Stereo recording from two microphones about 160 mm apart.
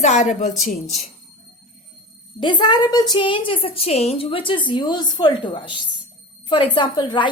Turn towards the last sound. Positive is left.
turn(degrees=30)  # may be behind; listen again after turning